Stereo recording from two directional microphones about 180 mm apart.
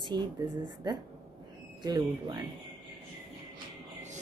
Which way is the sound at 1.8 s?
25° right (ahead or behind).